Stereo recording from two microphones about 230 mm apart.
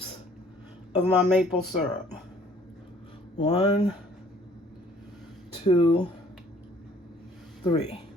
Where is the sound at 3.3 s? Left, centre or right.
Left.